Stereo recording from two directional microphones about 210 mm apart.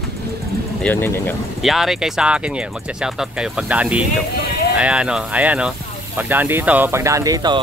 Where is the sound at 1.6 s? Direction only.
Centre (ahead or behind).